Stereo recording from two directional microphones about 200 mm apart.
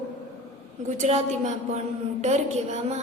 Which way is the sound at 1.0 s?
35° right (ahead or behind).